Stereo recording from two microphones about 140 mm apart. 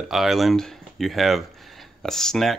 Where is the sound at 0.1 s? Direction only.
Centre (ahead or behind).